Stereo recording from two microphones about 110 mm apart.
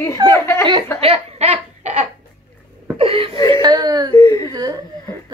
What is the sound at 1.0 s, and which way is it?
Laughter, 70° right (ahead or behind).